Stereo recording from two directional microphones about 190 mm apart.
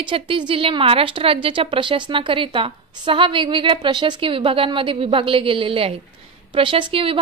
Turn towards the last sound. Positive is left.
turn(degrees=-30)  # may be behind; listen again after turning